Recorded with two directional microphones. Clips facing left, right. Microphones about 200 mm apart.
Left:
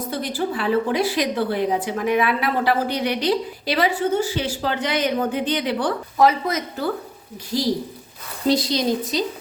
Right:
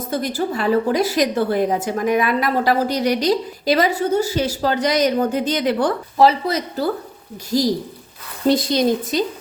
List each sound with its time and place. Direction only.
0.1 s a woman's voice: 45° right (ahead or behind)
6.1 s a woman's voice: 30° right (ahead or behind); by 9.2 s 50° right (ahead or behind)